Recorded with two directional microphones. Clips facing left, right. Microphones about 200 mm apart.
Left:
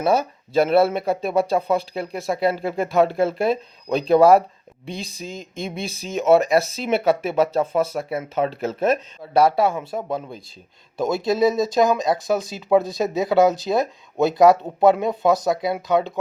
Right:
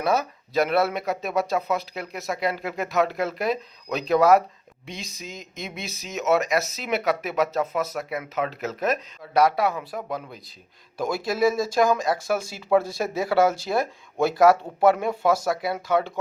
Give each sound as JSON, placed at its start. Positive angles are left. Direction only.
{"t": 0.0, "sound": "speech", "side_deg": 30}